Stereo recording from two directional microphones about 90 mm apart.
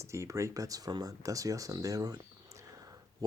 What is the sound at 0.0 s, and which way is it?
Speech, 35° right (ahead or behind).